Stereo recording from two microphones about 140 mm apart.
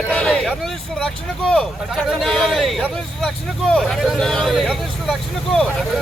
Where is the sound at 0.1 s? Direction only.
5° left (ahead or behind).